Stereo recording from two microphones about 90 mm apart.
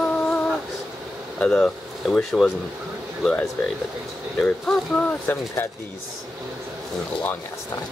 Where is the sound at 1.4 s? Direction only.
10° left (ahead or behind).